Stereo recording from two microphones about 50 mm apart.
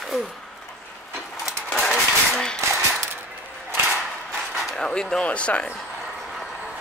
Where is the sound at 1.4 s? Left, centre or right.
Centre.